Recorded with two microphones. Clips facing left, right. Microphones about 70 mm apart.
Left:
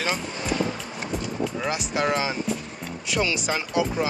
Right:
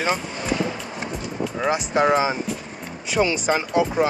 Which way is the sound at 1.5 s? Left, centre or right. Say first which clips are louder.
Right 9 dB; centre.